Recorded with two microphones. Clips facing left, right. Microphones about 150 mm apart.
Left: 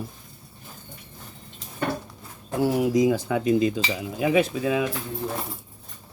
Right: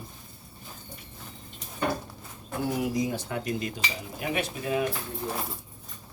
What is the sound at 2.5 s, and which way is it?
Speech, 90° left.